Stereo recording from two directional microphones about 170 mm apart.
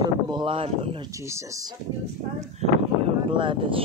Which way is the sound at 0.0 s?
25° right (ahead or behind).